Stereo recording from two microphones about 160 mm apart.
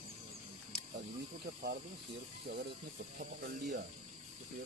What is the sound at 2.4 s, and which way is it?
Speech, 90° right.